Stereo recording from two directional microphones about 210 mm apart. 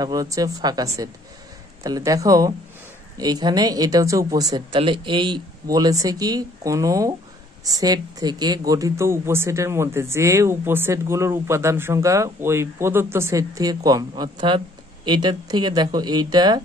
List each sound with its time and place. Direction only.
0.0 s a woman's voice: 15° right (ahead or behind)